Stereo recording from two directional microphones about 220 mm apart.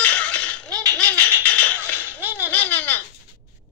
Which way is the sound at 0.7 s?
15° right (ahead or behind).